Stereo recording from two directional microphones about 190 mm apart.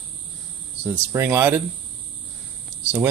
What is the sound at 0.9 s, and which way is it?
Speech, 10° right (ahead or behind).